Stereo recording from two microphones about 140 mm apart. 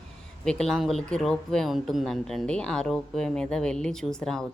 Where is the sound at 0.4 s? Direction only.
5° left (ahead or behind).